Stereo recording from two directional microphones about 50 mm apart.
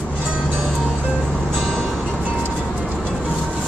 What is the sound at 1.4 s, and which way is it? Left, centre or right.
Music, centre.